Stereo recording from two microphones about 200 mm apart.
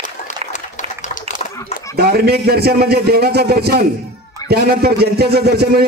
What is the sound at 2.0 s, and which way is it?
Speech, 50° right (ahead or behind).